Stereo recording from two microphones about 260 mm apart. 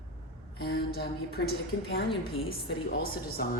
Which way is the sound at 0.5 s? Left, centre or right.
Left.